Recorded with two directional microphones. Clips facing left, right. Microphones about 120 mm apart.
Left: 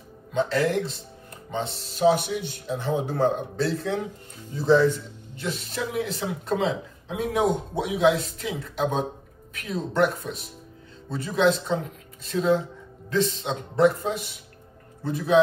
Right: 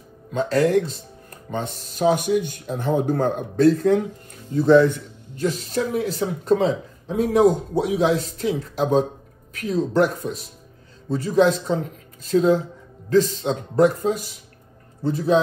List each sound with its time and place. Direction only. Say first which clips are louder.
0.3 s a man's voice: right 5 dB; 45° right (ahead or behind); by 5.0 s 60° right (ahead or behind)
5.4 s speech: right 7 dB; 40° right (ahead or behind)